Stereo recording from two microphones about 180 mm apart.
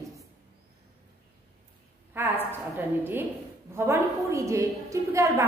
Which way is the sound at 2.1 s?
10° right (ahead or behind).